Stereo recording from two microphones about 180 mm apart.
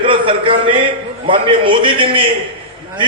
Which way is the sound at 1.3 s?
30° right (ahead or behind).